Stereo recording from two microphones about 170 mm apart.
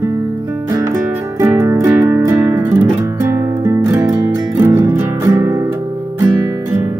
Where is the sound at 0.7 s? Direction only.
15° right (ahead or behind).